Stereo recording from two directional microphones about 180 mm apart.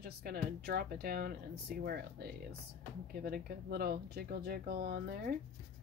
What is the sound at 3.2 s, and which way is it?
Speech, 55° right (ahead or behind).